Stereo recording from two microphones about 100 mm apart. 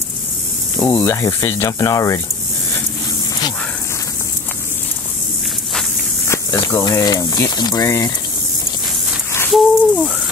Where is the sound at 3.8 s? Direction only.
30° left (ahead or behind).